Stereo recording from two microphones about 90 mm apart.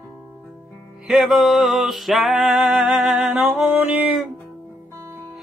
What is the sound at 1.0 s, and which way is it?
Music, 5° right (ahead or behind).